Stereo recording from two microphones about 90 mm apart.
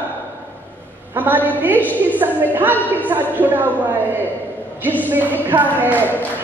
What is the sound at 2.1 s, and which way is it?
A woman's voice, 20° right (ahead or behind).